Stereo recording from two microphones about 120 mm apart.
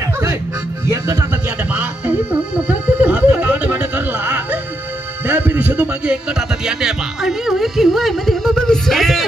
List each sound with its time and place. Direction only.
1.7 s music: 10° right (ahead or behind)
6.6 s speech: 5° right (ahead or behind)